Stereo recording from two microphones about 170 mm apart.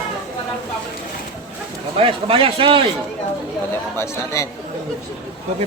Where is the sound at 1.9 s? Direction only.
35° right (ahead or behind).